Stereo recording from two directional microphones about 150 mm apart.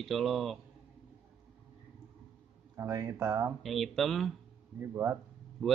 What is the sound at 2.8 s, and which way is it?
Speech, 20° right (ahead or behind).